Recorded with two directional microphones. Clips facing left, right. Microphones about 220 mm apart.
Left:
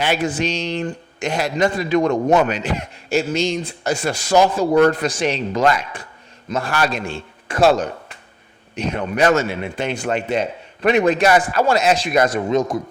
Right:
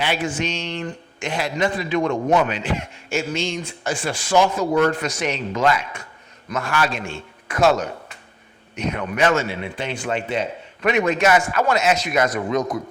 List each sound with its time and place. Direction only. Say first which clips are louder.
0.0 s a man's voice: left 3 dB; 40° left (ahead or behind)